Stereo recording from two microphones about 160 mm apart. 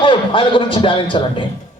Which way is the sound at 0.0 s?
30° left (ahead or behind).